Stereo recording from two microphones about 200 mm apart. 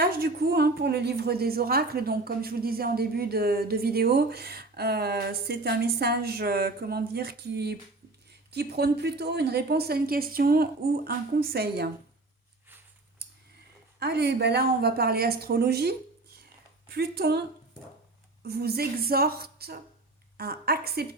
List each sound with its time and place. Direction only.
0.0 s a woman's voice: 50° right (ahead or behind)
14.0 s a woman's voice: 55° right (ahead or behind)
18.4 s a woman's voice: 50° right (ahead or behind)